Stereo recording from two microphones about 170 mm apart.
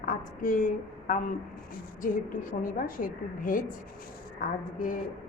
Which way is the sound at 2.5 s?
55° left (ahead or behind).